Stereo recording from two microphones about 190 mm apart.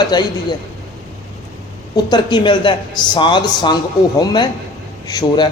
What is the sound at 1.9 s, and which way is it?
A man's voice, 25° left (ahead or behind).